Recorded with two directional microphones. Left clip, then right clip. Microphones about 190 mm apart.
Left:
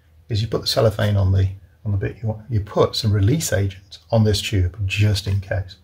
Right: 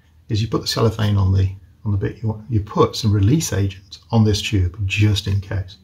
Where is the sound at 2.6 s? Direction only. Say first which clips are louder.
Right 1 dB; 25° left (ahead or behind).